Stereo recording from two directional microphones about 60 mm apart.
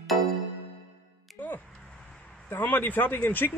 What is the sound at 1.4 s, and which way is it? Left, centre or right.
Music, left.